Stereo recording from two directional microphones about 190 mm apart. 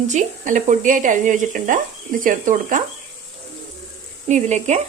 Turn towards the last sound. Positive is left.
turn(degrees=-35)  # may be behind; listen again after turning